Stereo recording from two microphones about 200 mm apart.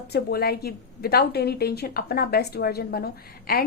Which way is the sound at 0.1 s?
50° left (ahead or behind).